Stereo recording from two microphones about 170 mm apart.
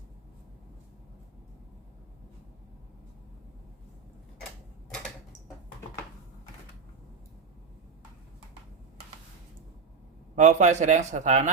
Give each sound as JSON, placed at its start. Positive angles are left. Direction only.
{"t": 10.3, "sound": "speech", "side_deg": -45}